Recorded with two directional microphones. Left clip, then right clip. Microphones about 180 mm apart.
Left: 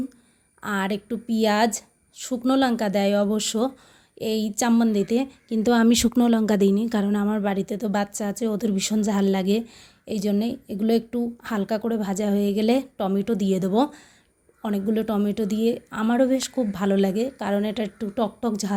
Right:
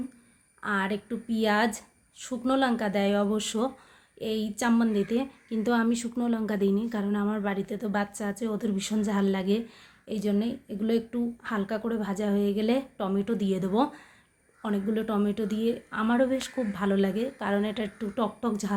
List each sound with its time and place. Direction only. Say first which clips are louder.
0.6 s a woman's voice: left 2 dB; 40° left (ahead or behind)